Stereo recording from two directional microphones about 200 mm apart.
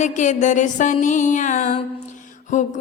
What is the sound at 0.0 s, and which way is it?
Music, 35° left (ahead or behind).